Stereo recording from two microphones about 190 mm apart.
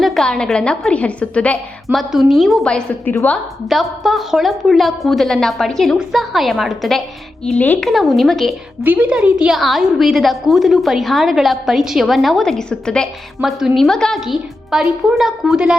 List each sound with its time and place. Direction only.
0.0 s a woman's voice: centre (ahead or behind)